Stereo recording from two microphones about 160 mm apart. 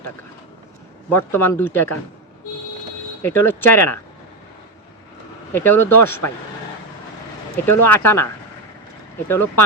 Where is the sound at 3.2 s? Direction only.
15° left (ahead or behind).